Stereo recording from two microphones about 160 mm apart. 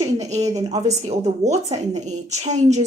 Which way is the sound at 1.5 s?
45° right (ahead or behind).